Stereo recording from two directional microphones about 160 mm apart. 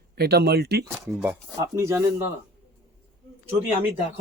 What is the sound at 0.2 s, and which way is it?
Speech, 85° right.